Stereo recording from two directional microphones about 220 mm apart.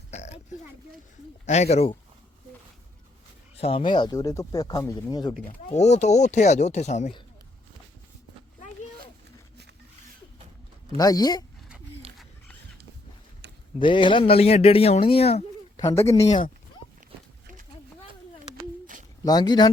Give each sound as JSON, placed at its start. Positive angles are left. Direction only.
{"t": 0.1, "sound": "speech", "side_deg": 30}
{"t": 3.6, "sound": "speech", "side_deg": 25}
{"t": 5.5, "sound": "speech", "side_deg": 25}
{"t": 10.9, "sound": "speech", "side_deg": 15}
{"t": 13.7, "sound": "speech", "side_deg": 20}
{"t": 15.9, "sound": "speech", "side_deg": 10}
{"t": 16.1, "sound": "speech", "side_deg": 30}
{"t": 19.2, "sound": "speech", "side_deg": 20}